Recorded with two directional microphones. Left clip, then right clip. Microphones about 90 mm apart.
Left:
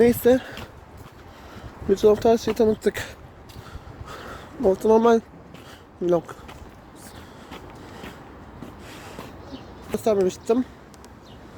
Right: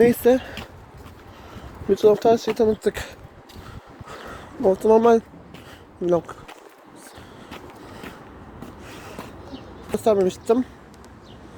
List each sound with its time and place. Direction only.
0.0 s speech: 20° left (ahead or behind)
1.9 s speech: 25° left (ahead or behind)
2.1 s speech: 45° left (ahead or behind)
4.3 s speech: 20° left (ahead or behind)
8.9 s a sound: 5° left (ahead or behind)
9.9 s a woman's voice: 5° right (ahead or behind)